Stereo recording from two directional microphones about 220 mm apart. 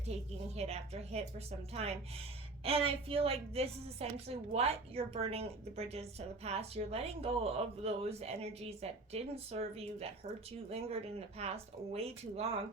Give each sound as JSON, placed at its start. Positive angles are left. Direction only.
{"t": 0.1, "sound": "a woman's voice", "side_deg": -30}